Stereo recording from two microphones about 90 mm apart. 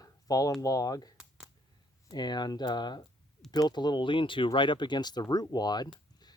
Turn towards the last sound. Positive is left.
turn(degrees=50)  # may be behind; listen again after turning